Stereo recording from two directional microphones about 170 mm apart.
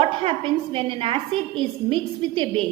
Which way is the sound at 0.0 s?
30° right (ahead or behind).